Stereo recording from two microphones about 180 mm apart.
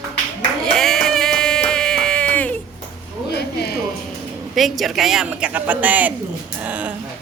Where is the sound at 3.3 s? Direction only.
65° left (ahead or behind).